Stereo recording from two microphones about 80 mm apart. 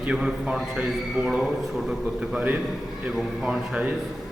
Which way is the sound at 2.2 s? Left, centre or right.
Centre.